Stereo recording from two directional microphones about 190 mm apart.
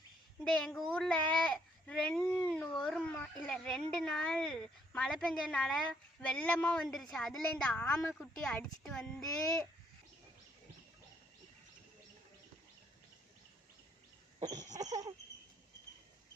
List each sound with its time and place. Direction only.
0.4 s speech: 5° left (ahead or behind)
14.4 s cough: 20° right (ahead or behind)
14.8 s cricket: 20° right (ahead or behind)